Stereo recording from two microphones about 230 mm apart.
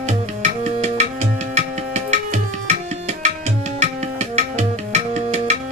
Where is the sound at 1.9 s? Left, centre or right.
Right.